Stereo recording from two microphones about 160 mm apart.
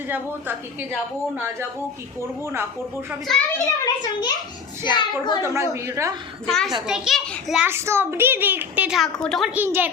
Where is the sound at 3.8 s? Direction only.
25° left (ahead or behind).